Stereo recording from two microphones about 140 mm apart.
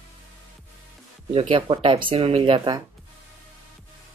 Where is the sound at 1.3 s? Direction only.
40° right (ahead or behind).